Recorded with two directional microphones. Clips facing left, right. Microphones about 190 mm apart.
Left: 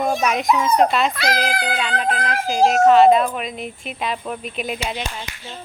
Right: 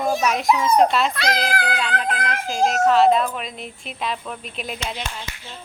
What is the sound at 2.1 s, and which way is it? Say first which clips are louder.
Speech: left 3 dB; 35° left (ahead or behind).